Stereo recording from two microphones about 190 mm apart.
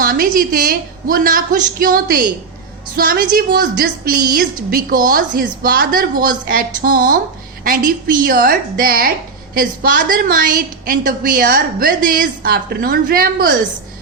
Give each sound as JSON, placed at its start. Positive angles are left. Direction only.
{"t": 0.0, "sound": "a woman's voice", "side_deg": -50}